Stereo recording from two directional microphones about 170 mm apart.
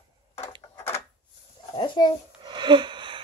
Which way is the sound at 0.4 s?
15° left (ahead or behind).